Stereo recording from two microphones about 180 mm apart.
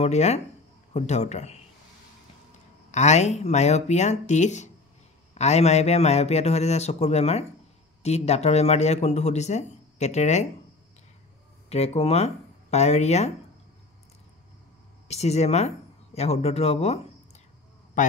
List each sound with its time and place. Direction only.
0.0 s speech: 40° left (ahead or behind)
2.9 s speech: 40° left (ahead or behind)
11.7 s speech: 35° left (ahead or behind)
15.0 s a man's voice: 35° left (ahead or behind)